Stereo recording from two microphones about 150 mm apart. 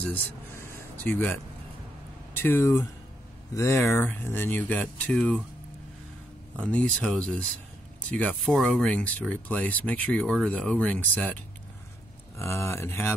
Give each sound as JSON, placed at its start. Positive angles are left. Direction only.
{"t": 0.0, "sound": "speech", "side_deg": 15}
{"t": 6.5, "sound": "speech", "side_deg": 10}